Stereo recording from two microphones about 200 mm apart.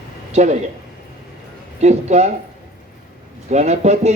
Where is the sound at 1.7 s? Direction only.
35° right (ahead or behind).